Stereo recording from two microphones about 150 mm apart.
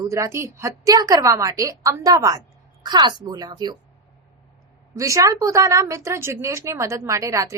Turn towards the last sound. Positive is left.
turn(degrees=-20)  # may be behind; listen again after turning